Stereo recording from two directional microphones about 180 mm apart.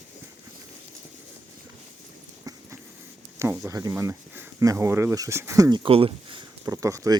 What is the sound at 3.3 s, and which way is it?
Speech, 15° right (ahead or behind).